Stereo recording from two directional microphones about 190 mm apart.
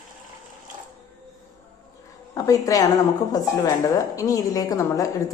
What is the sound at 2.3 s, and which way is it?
A woman's voice, 20° left (ahead or behind).